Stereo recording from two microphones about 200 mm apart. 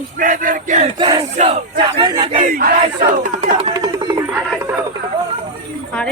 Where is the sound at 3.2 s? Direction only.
40° right (ahead or behind).